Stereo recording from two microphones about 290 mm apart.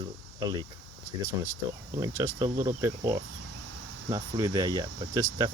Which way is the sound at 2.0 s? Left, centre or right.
Centre.